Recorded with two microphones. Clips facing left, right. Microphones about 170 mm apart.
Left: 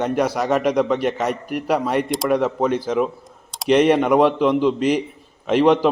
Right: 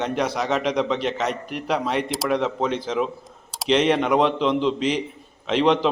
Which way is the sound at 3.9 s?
10° left (ahead or behind).